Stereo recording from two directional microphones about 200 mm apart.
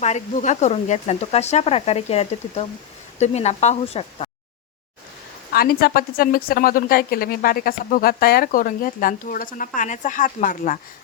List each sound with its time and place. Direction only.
0.0 s speech: 35° left (ahead or behind)
5.5 s a woman's voice: 50° left (ahead or behind)